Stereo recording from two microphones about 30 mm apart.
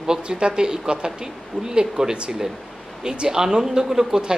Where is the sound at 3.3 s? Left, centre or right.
Centre.